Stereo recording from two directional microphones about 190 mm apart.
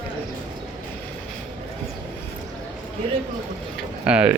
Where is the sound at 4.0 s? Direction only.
5° right (ahead or behind).